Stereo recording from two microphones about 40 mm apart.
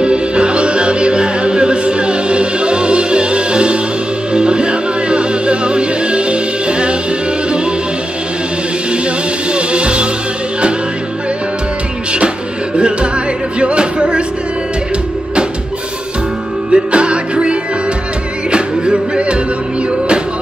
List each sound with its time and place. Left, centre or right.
0.0 s music: right
9.5 s music: right
12.7 s music: right
16.7 s music: right